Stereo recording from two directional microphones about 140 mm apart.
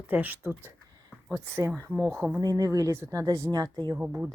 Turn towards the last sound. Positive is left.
turn(degrees=-15)  # may be behind; listen again after turning